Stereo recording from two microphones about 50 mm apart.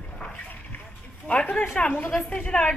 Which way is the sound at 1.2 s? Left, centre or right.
Left.